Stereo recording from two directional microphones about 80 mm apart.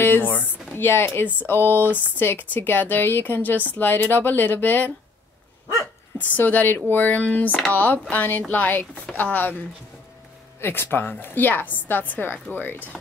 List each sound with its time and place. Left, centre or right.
0.0 s speech: left
6.1 s speech: left
10.6 s speech: left